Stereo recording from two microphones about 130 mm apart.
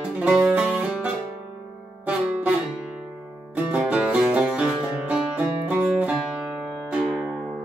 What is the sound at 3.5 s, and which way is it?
Music, 10° right (ahead or behind).